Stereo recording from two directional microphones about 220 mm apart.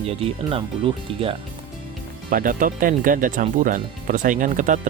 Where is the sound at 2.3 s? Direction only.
40° right (ahead or behind).